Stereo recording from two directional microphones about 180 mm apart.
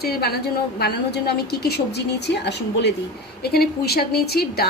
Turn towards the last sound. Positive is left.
turn(degrees=60)  # may be behind; listen again after turning